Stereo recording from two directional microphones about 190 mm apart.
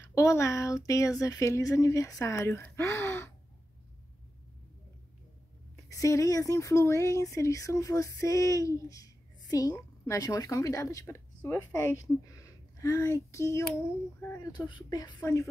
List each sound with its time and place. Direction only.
0.1 s speech: 15° left (ahead or behind)
5.9 s speech: 15° left (ahead or behind)